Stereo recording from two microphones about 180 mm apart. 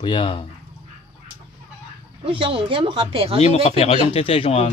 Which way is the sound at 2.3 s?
30° right (ahead or behind).